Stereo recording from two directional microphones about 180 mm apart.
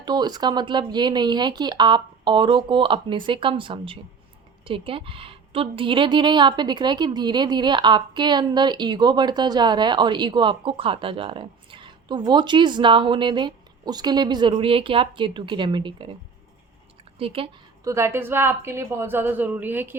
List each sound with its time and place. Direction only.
0.0 s a woman's voice: 25° right (ahead or behind)
17.2 s a woman's voice: 30° right (ahead or behind)
17.8 s a woman's voice: 15° right (ahead or behind)